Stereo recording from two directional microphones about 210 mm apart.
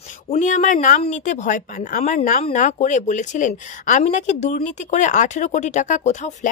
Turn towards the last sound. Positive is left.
turn(degrees=35)  # may be behind; listen again after turning